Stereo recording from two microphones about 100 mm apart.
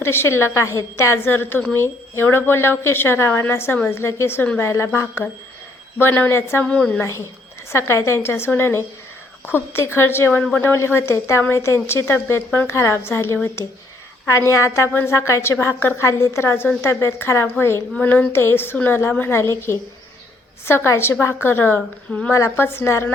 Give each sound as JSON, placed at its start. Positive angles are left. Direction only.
{"t": 0.0, "sound": "a woman's voice", "side_deg": 25}
{"t": 6.7, "sound": "a woman's voice", "side_deg": 10}
{"t": 7.7, "sound": "a woman's voice", "side_deg": 30}